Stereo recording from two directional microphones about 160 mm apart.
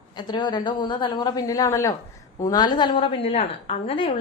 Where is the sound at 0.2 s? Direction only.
25° left (ahead or behind).